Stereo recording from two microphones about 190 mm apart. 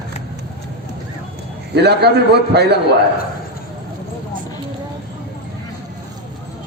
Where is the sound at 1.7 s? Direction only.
60° right (ahead or behind).